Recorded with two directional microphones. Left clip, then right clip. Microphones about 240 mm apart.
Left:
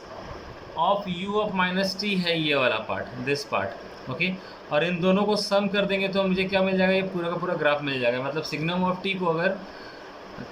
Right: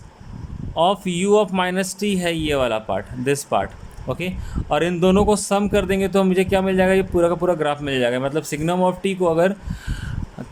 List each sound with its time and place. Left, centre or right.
0.8 s speech: right